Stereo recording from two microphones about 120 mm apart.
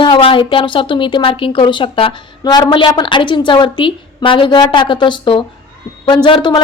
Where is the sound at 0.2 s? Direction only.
50° left (ahead or behind).